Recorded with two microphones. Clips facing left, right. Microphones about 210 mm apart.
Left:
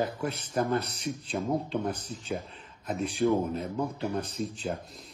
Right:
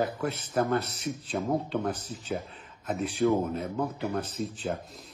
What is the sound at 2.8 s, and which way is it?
Speech, 5° right (ahead or behind).